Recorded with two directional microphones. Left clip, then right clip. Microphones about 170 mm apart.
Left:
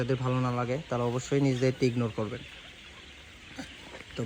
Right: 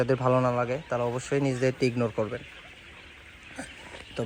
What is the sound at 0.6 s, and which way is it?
Speech, 20° left (ahead or behind).